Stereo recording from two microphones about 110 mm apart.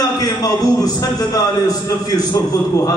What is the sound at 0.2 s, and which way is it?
A man's voice, 35° left (ahead or behind).